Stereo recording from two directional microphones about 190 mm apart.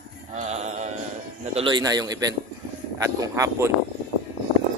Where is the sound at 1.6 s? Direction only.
25° right (ahead or behind).